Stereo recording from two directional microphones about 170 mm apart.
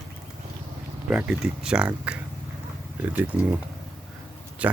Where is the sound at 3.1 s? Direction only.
10° right (ahead or behind).